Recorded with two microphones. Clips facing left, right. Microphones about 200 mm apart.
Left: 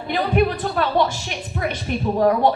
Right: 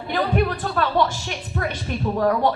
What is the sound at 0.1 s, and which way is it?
Speech, 15° left (ahead or behind).